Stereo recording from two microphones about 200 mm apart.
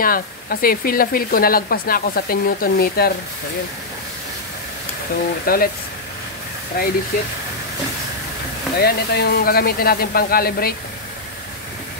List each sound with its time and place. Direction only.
0.0 s speech: 45° left (ahead or behind)
5.4 s speech: 50° left (ahead or behind)
6.7 s speech: 50° left (ahead or behind)
8.7 s speech: 55° left (ahead or behind)